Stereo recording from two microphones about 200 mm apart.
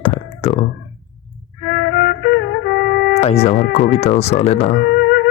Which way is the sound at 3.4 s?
45° left (ahead or behind).